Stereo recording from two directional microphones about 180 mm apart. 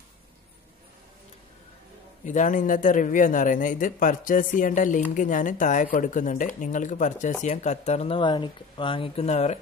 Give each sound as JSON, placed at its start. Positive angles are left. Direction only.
{"t": 2.2, "sound": "speech", "side_deg": 45}